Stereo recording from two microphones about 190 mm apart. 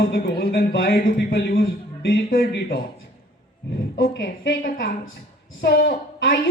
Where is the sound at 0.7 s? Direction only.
65° left (ahead or behind).